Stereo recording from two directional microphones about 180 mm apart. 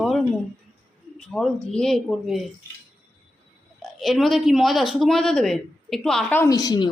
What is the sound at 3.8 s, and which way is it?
Speech, centre (ahead or behind).